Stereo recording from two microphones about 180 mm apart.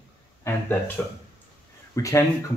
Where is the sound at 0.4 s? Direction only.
15° left (ahead or behind).